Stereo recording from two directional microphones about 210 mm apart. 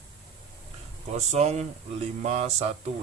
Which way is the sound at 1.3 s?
30° right (ahead or behind).